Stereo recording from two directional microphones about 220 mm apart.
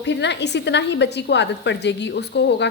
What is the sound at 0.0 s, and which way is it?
A woman's voice, 50° left (ahead or behind).